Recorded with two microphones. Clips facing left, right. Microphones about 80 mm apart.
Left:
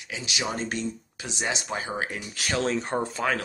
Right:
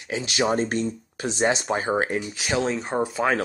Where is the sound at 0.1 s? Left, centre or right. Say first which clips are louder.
Right 8 dB; right.